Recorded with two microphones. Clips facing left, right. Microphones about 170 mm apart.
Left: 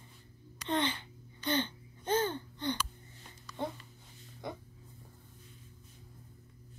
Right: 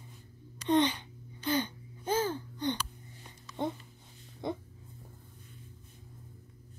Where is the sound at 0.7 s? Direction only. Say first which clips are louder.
Right 6 dB; 15° right (ahead or behind).